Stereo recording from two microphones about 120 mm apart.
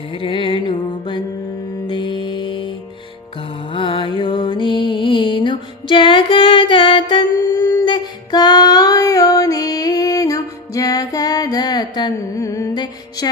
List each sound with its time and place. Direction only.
0.1 s music: 45° left (ahead or behind); by 12.8 s 25° left (ahead or behind)